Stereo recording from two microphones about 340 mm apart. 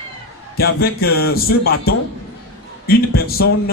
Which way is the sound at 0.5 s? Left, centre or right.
Left.